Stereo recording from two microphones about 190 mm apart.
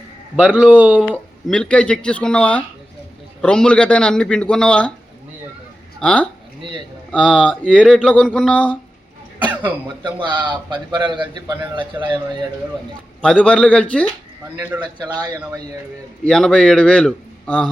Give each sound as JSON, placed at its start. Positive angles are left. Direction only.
{"t": 0.3, "sound": "a man's voice", "side_deg": -10}
{"t": 1.1, "sound": "speech", "side_deg": 5}
{"t": 6.0, "sound": "speech", "side_deg": 5}
{"t": 10.0, "sound": "a man's voice", "side_deg": -25}
{"t": 13.2, "sound": "speech", "side_deg": 5}
{"t": 15.1, "sound": "speech", "side_deg": -20}
{"t": 16.2, "sound": "speech", "side_deg": 5}